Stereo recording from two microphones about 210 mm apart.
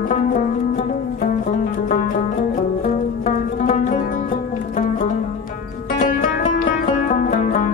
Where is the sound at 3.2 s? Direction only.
35° left (ahead or behind).